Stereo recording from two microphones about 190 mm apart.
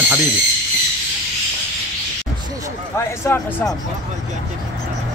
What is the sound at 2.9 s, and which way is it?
Speech, 10° left (ahead or behind).